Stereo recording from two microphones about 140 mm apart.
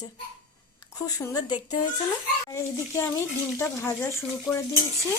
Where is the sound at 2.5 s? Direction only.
20° left (ahead or behind).